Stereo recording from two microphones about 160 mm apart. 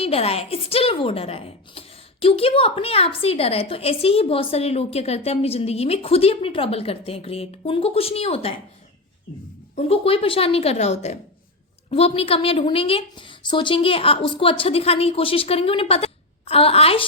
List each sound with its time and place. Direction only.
0.0 s a woman's voice: 40° left (ahead or behind)
9.7 s a woman's voice: 40° left (ahead or behind)